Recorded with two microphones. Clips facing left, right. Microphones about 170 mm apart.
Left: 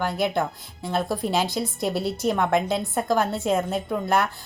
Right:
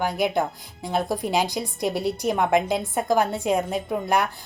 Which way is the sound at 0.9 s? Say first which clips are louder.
Even; 15° right (ahead or behind).